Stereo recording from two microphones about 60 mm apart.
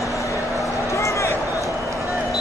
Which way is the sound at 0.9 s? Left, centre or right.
Left.